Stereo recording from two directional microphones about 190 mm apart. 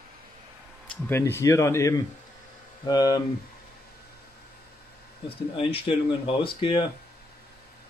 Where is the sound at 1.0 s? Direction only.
10° left (ahead or behind).